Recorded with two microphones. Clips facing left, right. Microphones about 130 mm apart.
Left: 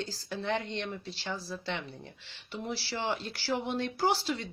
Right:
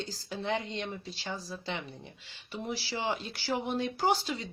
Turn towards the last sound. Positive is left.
turn(degrees=-15)  # may be behind; listen again after turning